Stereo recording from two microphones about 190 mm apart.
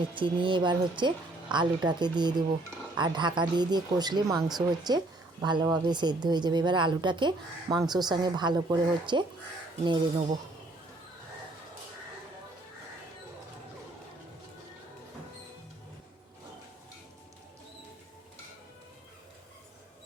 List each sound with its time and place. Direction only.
0.1 s speech: 25° right (ahead or behind)